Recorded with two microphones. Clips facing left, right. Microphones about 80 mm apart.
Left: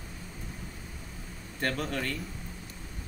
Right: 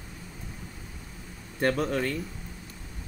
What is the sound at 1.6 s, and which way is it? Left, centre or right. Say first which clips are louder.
Speech: right 6 dB; centre.